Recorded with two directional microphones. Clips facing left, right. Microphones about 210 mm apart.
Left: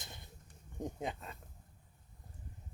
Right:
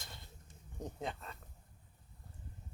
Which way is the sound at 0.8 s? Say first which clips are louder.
Left 2 dB; 10° left (ahead or behind).